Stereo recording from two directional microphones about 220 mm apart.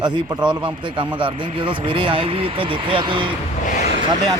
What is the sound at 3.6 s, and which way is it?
Vehicle, 35° left (ahead or behind).